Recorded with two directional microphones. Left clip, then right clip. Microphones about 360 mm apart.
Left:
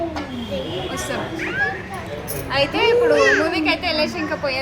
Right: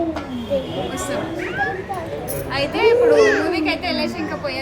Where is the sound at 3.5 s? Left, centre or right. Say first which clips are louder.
Left 1 dB; centre.